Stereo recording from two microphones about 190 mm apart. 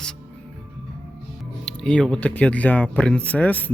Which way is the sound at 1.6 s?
5° left (ahead or behind).